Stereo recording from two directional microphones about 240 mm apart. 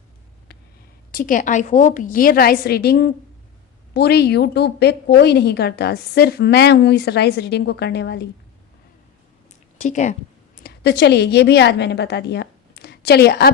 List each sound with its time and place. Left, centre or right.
1.1 s a woman's voice: left
9.8 s speech: left
10.6 s a woman's voice: left